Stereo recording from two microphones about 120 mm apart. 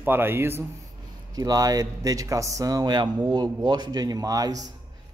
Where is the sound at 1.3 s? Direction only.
30° right (ahead or behind).